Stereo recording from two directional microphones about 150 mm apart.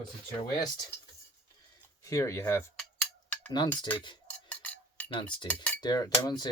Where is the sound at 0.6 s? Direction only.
25° left (ahead or behind).